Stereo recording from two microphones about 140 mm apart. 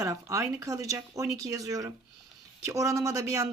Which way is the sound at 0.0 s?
20° right (ahead or behind).